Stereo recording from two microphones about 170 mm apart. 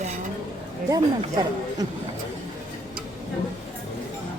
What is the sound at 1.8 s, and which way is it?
Speech, 25° right (ahead or behind).